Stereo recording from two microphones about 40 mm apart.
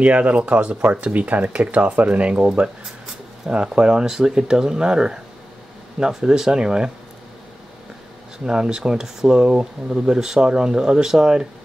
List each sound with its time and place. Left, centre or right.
0.0 s speech: right
8.5 s speech: centre